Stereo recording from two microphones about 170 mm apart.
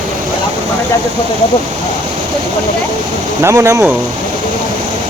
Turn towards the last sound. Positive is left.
turn(degrees=-15)  # may be behind; listen again after turning